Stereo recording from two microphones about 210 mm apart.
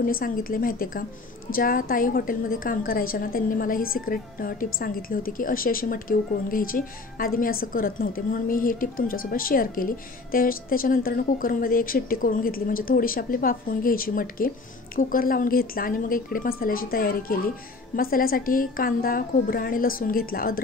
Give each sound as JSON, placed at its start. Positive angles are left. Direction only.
{"t": 0.0, "sound": "a woman's voice", "side_deg": 40}